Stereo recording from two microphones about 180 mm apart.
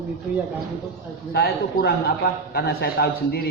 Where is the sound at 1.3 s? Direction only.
60° left (ahead or behind).